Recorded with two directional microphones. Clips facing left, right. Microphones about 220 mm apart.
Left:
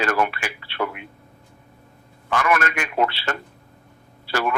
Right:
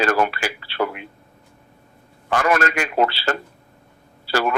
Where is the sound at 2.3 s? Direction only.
35° right (ahead or behind).